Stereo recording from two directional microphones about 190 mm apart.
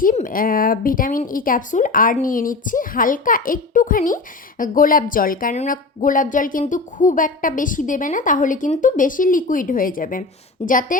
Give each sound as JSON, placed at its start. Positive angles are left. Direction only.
{"t": 0.0, "sound": "speech", "side_deg": 45}